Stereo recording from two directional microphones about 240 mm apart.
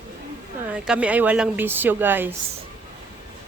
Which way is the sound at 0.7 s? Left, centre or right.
Centre.